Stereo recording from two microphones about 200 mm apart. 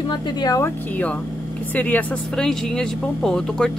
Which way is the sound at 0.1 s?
20° left (ahead or behind).